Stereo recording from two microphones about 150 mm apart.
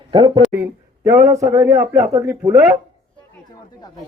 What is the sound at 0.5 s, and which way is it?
A man's voice, 15° right (ahead or behind).